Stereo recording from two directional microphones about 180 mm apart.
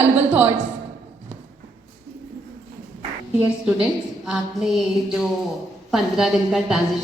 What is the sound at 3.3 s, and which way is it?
A woman's voice, 5° right (ahead or behind).